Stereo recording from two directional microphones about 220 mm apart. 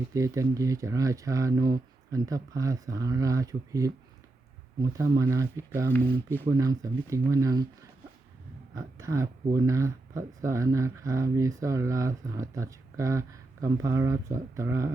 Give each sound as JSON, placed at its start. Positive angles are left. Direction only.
{"t": 0.1, "sound": "speech", "side_deg": -15}
{"t": 8.7, "sound": "speech", "side_deg": -15}